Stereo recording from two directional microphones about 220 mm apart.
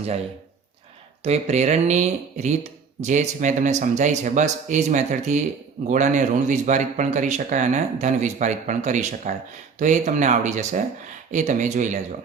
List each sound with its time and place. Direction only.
1.2 s a man's voice: 30° right (ahead or behind)